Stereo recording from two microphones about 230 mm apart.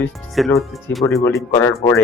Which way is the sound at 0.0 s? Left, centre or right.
Centre.